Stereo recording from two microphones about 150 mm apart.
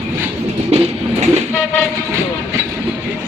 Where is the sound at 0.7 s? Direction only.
45° right (ahead or behind).